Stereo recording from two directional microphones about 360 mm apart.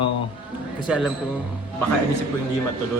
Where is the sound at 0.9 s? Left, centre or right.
Centre.